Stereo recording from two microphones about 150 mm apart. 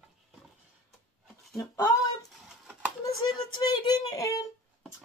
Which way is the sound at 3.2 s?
30° left (ahead or behind).